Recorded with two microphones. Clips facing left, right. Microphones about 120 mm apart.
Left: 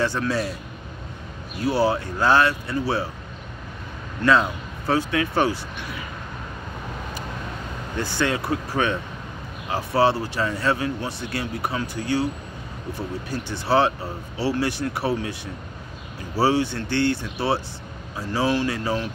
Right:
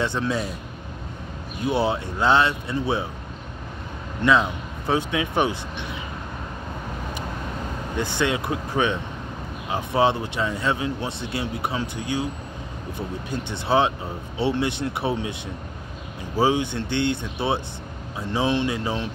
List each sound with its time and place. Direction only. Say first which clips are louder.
0.0 s speech: left 1 dB; 20° right (ahead or behind)
1.6 s speech: left 2 dB; 20° right (ahead or behind)
4.2 s speech: even; 20° right (ahead or behind)
8.0 s speech: even; 20° right (ahead or behind)
13.3 s speech: left 1 dB; 20° right (ahead or behind)